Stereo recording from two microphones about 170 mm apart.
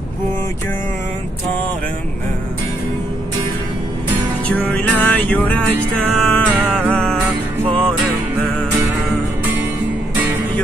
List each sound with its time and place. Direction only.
4.5 s music: 10° left (ahead or behind)
7.6 s music: 30° right (ahead or behind)